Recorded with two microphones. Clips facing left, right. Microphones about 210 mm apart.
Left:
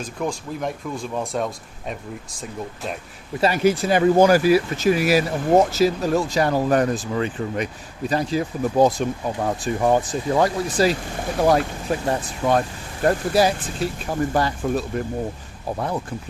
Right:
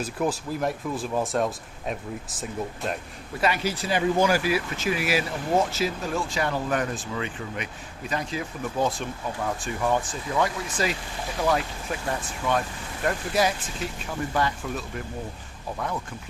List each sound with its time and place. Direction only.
0.0 s speech: 5° right (ahead or behind)
3.6 s speech: 50° left (ahead or behind); by 15.0 s 35° left (ahead or behind)